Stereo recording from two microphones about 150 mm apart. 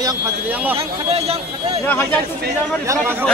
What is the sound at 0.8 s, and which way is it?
Speech, 40° right (ahead or behind).